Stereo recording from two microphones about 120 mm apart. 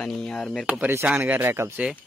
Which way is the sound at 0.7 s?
15° right (ahead or behind).